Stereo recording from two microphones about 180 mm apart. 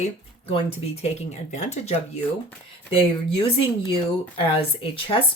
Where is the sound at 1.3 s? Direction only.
40° left (ahead or behind).